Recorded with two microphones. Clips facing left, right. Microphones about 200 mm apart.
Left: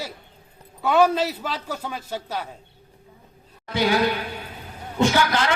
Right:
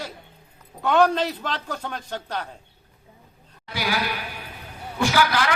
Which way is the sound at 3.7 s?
25° left (ahead or behind).